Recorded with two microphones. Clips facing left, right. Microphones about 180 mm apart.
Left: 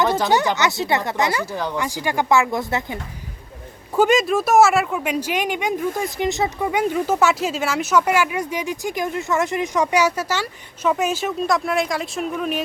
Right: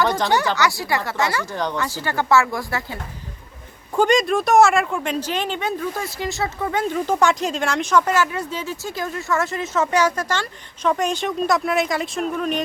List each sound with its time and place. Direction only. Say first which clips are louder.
0.3 s speech: left 1 dB; 20° left (ahead or behind)
1.5 s speech: even; 5° left (ahead or behind)
3.9 s speech: left 1 dB; 5° left (ahead or behind)